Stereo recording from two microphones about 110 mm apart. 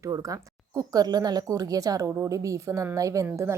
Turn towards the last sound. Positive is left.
turn(degrees=-25)  # may be behind; listen again after turning